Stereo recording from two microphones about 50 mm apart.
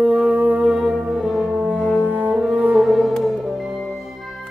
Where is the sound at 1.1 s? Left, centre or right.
Centre.